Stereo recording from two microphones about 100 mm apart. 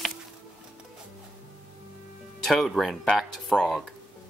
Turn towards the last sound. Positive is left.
turn(degrees=5)  # may be behind; listen again after turning